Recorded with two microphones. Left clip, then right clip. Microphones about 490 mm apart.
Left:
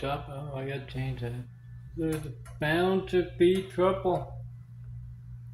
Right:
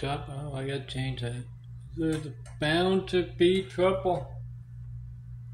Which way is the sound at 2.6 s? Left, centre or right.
Left.